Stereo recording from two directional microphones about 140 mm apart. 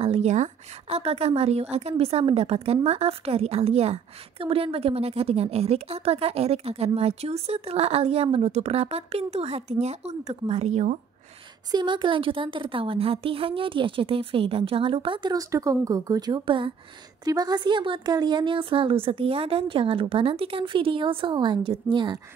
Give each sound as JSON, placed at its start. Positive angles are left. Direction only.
{"t": 0.0, "sound": "a woman's voice", "side_deg": -50}
{"t": 11.7, "sound": "a woman's voice", "side_deg": -35}